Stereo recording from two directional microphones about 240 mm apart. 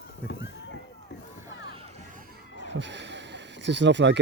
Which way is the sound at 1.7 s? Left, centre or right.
Right.